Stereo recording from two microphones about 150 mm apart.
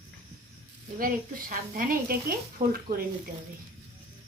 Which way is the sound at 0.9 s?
70° right (ahead or behind).